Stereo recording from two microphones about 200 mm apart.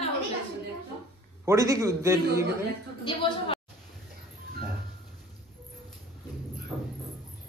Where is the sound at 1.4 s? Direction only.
15° right (ahead or behind).